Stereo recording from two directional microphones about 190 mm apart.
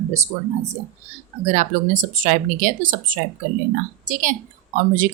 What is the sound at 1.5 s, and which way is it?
Speech, 40° right (ahead or behind).